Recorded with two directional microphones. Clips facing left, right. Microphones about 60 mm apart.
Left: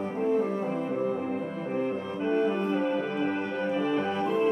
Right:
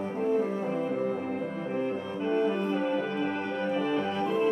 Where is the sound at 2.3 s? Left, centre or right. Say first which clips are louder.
Left 1 dB; centre.